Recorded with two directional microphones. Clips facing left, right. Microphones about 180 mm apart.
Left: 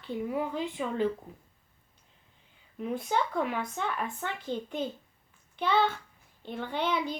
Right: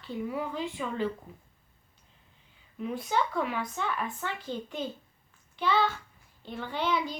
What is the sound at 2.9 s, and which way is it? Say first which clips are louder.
A child's voice: even; 50° left (ahead or behind).